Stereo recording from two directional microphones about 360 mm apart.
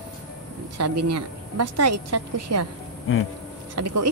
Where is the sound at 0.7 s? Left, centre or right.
Right.